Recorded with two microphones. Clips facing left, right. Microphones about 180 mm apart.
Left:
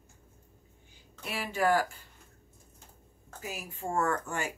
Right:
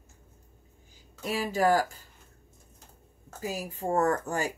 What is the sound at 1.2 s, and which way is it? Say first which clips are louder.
Speech: right 4 dB; 40° right (ahead or behind).